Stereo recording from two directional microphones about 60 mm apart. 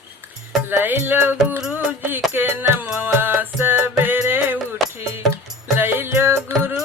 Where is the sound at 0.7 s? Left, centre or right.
Right.